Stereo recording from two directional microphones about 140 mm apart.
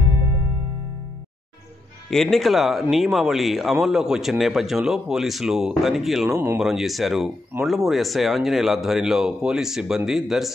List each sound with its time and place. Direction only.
2.0 s speech: centre (ahead or behind)
6.3 s speech: 20° right (ahead or behind)
6.6 s speech: centre (ahead or behind)